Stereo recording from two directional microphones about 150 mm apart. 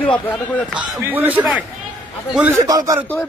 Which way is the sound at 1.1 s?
10° right (ahead or behind).